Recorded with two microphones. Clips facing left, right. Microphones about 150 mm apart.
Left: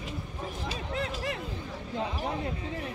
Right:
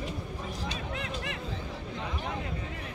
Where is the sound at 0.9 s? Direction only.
35° left (ahead or behind).